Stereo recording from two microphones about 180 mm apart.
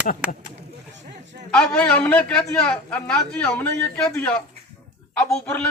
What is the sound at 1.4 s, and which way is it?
A man's voice, 5° left (ahead or behind).